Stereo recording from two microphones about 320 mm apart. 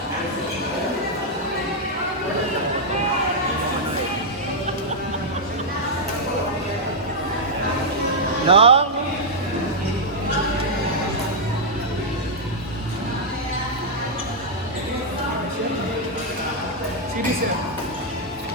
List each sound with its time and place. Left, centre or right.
8.4 s speech: centre